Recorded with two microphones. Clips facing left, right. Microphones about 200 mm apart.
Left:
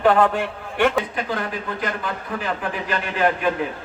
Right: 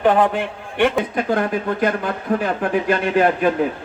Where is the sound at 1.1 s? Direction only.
50° right (ahead or behind).